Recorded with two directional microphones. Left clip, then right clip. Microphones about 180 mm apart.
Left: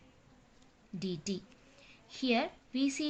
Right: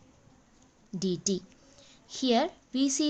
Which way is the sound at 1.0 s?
50° right (ahead or behind).